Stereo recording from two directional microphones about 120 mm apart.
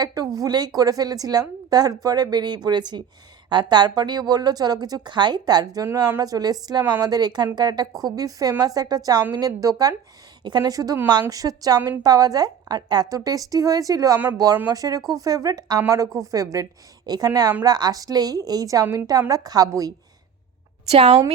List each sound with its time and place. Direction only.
0.0 s a woman's voice: 35° right (ahead or behind)
5.8 s a woman's voice: 25° right (ahead or behind)
20.9 s a woman's voice: 55° right (ahead or behind)